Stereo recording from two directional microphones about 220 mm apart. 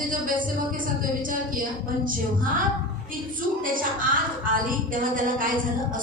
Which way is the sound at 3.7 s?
40° right (ahead or behind).